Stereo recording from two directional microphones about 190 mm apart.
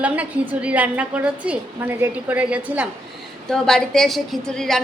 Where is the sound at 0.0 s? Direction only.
10° right (ahead or behind).